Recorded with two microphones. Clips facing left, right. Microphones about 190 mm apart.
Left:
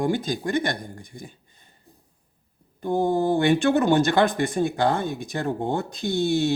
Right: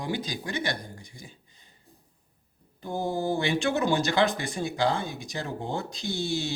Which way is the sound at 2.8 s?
55° left (ahead or behind).